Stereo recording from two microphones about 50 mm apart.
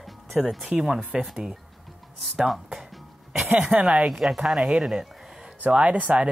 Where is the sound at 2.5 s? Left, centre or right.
Centre.